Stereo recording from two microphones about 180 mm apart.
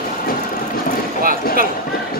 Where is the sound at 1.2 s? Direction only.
50° right (ahead or behind).